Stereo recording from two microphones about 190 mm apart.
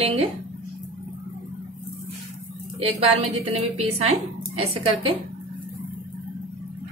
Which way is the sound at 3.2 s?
35° right (ahead or behind).